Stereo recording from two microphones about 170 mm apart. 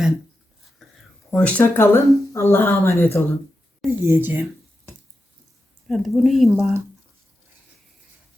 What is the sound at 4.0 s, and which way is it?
Speech, 15° right (ahead or behind).